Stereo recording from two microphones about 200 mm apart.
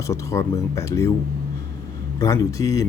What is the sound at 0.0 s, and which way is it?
Speech, 15° left (ahead or behind).